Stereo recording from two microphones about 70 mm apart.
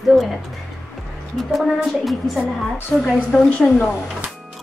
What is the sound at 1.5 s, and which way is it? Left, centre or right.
A woman's voice, centre.